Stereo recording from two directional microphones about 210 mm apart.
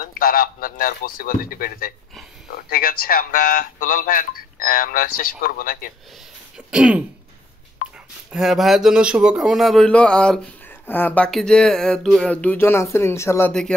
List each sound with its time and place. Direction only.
0.0 s speech: 45° left (ahead or behind)
6.7 s speech: 5° right (ahead or behind)
8.3 s a man's voice: centre (ahead or behind)